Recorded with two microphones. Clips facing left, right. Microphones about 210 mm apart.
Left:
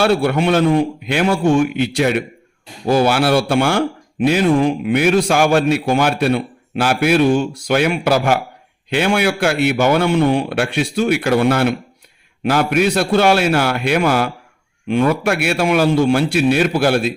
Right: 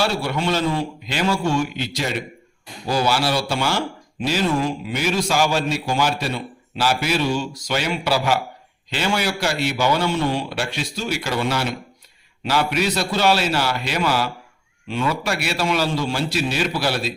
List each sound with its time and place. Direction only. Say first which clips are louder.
0.0 s a man's voice: left 7 dB; 55° left (ahead or behind)